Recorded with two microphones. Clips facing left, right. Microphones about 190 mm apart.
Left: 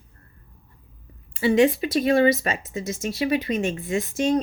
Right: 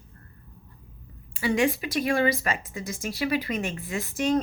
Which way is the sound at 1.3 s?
25° left (ahead or behind).